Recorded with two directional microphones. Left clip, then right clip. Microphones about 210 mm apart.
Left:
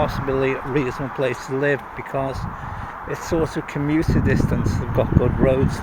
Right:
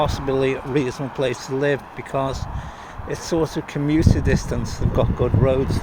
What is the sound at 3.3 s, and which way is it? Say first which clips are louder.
Speech: even; centre (ahead or behind).